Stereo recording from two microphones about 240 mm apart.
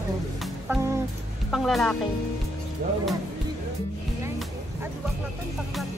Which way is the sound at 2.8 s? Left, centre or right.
Right.